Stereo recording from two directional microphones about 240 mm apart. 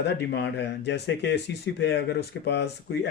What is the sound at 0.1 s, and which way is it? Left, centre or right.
Speech, left.